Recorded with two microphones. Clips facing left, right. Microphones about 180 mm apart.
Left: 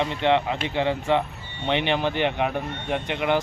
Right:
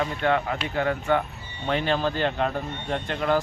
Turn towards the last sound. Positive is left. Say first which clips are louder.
# left 1 dB
turn(degrees=15)  # may be behind; listen again after turning